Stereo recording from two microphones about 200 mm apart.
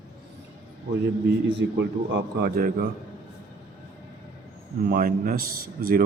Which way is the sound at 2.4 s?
50° right (ahead or behind).